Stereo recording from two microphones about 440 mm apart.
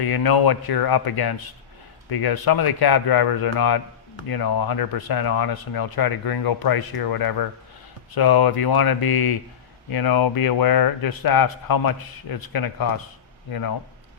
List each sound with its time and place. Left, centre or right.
0.0 s speech: left